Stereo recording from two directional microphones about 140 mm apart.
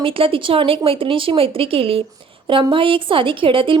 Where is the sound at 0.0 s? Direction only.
40° right (ahead or behind).